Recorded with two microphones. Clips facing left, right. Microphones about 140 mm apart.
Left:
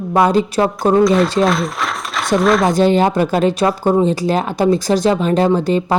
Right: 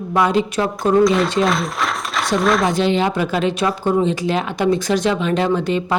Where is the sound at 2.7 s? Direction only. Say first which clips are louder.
Left 5 dB; 45° left (ahead or behind).